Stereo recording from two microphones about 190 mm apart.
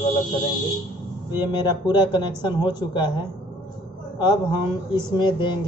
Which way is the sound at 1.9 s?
25° left (ahead or behind).